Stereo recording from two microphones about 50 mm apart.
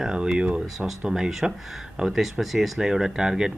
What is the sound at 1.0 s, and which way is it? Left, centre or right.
Speech, centre.